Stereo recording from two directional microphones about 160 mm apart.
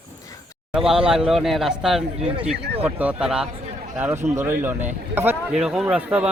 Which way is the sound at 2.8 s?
10° right (ahead or behind).